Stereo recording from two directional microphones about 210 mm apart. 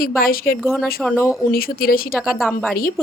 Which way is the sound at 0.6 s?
Centre (ahead or behind).